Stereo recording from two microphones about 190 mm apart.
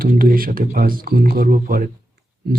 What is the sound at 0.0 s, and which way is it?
Speech, 50° right (ahead or behind).